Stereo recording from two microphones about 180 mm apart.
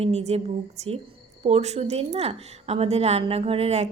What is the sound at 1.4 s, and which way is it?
A woman's voice, 35° right (ahead or behind).